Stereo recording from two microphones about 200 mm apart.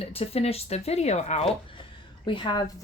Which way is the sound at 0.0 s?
30° left (ahead or behind).